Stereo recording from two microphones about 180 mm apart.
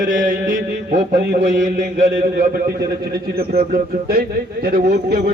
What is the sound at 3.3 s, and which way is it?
A man's voice, 55° right (ahead or behind).